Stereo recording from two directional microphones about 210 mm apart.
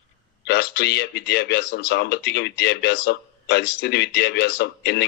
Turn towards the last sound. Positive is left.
turn(degrees=55)  # may be behind; listen again after turning